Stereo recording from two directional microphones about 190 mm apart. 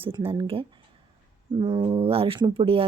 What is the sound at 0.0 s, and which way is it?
Speech, 30° right (ahead or behind).